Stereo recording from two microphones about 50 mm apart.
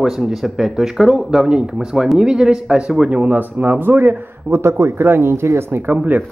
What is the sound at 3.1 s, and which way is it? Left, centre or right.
A man's voice, right.